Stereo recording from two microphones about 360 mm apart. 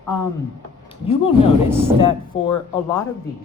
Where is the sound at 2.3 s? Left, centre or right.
Centre.